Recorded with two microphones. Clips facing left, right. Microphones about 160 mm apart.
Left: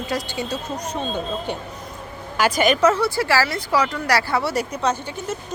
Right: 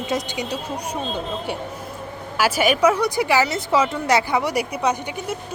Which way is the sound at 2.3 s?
5° right (ahead or behind).